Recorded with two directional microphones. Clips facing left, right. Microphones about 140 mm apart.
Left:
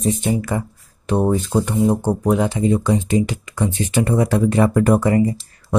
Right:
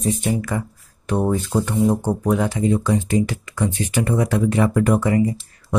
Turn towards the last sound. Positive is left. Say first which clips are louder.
# left 2 dB
turn(degrees=35)  # may be behind; listen again after turning